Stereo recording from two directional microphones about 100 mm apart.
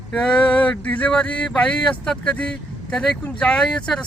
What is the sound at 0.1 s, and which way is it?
Speech, 10° left (ahead or behind).